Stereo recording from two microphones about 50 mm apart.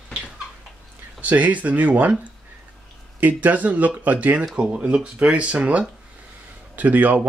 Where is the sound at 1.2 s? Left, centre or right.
Right.